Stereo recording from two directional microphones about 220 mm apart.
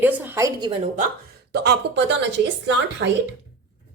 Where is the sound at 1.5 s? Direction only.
50° right (ahead or behind).